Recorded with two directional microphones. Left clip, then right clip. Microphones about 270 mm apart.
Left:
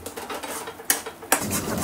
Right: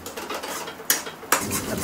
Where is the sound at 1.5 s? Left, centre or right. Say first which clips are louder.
Even; centre.